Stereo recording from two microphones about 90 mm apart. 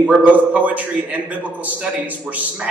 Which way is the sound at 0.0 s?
15° right (ahead or behind).